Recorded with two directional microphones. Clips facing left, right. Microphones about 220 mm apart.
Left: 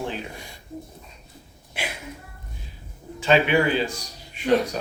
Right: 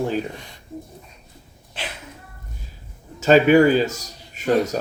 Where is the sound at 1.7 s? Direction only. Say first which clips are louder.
Left 1 dB; 10° left (ahead or behind).